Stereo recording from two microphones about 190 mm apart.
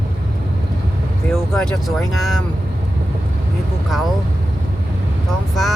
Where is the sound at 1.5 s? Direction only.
Centre (ahead or behind).